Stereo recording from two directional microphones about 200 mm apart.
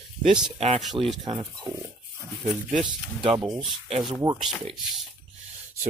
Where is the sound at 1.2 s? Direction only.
25° right (ahead or behind).